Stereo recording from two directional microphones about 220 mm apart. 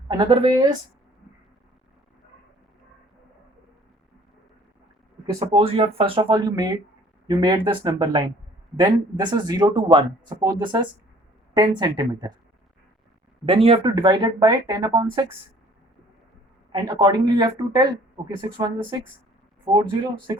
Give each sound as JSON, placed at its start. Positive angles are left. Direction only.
{"t": 0.1, "sound": "a woman's voice", "side_deg": -20}
{"t": 5.2, "sound": "speech", "side_deg": -20}
{"t": 13.4, "sound": "speech", "side_deg": -25}
{"t": 16.7, "sound": "speech", "side_deg": -20}